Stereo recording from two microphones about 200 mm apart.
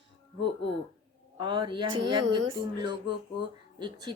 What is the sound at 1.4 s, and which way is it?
Speech, 25° right (ahead or behind).